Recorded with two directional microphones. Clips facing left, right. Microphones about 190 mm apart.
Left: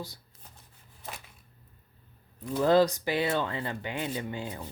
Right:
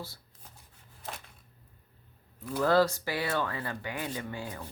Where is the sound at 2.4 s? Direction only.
20° left (ahead or behind).